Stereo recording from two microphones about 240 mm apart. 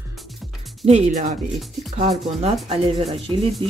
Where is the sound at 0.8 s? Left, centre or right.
Right.